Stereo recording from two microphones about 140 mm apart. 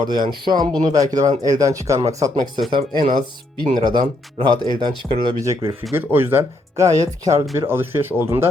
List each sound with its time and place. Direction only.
0.0 s speech: 30° right (ahead or behind)
5.9 s speech: 15° right (ahead or behind)